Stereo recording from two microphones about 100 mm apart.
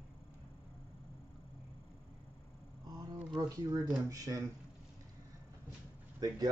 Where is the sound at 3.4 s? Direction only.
40° right (ahead or behind).